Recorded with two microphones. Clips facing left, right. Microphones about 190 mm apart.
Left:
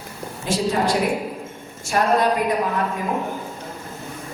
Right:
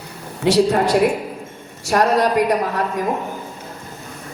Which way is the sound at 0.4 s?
70° right (ahead or behind).